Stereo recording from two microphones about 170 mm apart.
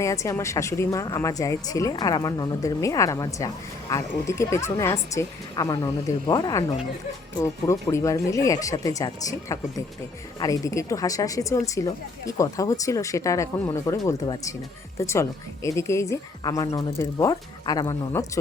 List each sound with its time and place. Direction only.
0.0 s speech: 20° left (ahead or behind)